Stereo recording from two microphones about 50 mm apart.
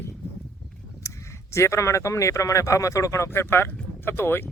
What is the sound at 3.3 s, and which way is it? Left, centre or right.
Speech, left.